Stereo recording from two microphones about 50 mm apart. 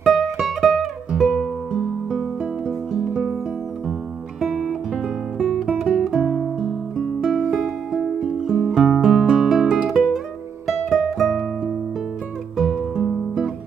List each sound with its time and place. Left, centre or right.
0.0 s music: centre
2.0 s music: centre
4.4 s music: centre
5.7 s guitar: centre
7.6 s music: centre
12.5 s music: centre